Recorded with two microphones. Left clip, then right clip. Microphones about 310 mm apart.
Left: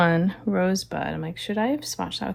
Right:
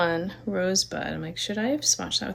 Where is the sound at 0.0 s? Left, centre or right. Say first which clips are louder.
Left 3 dB; left.